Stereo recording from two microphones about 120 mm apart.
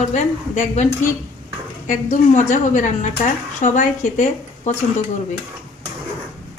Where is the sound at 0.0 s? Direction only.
85° left.